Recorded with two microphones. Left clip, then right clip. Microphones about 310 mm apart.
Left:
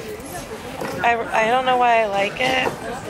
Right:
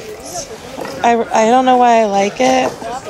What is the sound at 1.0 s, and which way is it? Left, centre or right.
Speech, right.